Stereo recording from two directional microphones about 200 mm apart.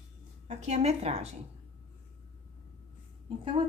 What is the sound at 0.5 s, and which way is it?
Speech, 35° right (ahead or behind).